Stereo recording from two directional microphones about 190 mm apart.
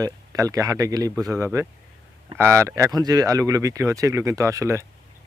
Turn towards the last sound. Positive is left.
turn(degrees=-15)  # may be behind; listen again after turning